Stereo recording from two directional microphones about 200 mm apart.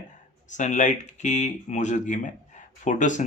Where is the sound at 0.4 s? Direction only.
40° left (ahead or behind).